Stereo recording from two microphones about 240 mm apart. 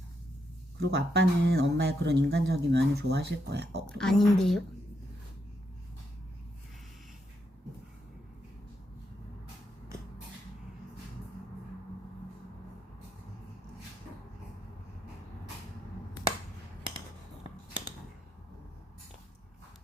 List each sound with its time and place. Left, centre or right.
0.8 s speech: right
3.8 s a woman's voice: centre